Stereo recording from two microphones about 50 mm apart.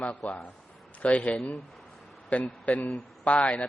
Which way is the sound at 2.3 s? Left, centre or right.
Left.